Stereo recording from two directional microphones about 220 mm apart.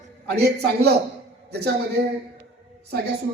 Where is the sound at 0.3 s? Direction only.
50° right (ahead or behind).